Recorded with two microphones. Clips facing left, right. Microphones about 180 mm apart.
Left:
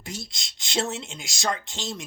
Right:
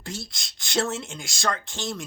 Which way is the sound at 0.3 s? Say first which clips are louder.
Even; 20° left (ahead or behind).